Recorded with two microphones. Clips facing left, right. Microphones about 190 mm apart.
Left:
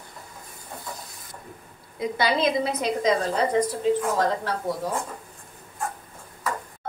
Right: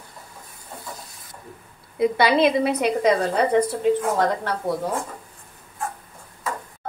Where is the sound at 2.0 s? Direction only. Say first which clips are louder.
Right 6 dB; 65° right (ahead or behind).